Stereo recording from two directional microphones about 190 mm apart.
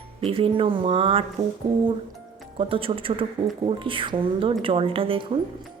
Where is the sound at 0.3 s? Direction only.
30° right (ahead or behind).